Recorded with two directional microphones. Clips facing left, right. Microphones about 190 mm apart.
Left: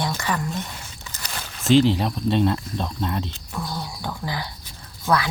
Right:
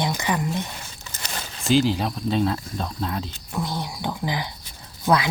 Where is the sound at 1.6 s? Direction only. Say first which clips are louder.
Left 3 dB; centre (ahead or behind).